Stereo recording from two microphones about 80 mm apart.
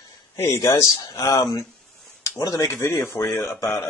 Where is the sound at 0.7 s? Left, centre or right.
Left.